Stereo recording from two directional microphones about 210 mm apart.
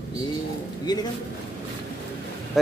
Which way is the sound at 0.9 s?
20° left (ahead or behind).